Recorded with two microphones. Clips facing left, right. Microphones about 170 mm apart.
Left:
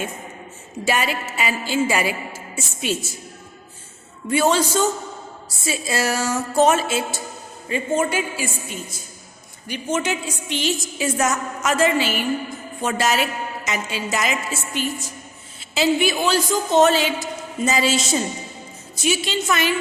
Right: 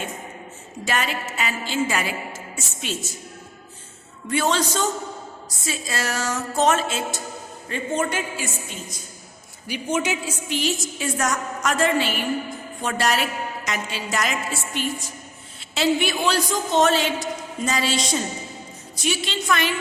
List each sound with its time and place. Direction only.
0.9 s music: 10° left (ahead or behind)
4.3 s music: 10° left (ahead or behind)
9.6 s a woman's voice: 10° right (ahead or behind)